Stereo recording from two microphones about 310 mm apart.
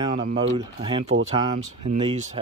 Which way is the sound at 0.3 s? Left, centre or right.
Centre.